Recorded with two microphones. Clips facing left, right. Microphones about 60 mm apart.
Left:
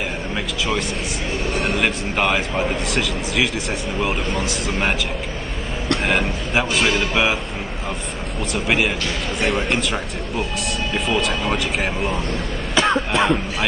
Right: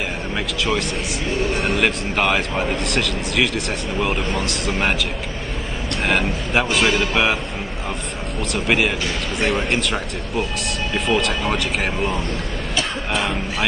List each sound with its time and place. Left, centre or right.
1.6 s speech: centre
6.0 s speech: centre
8.5 s speech: centre